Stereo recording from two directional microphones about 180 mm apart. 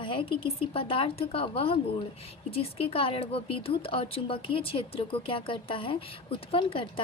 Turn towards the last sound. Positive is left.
turn(degrees=30)  # may be behind; listen again after turning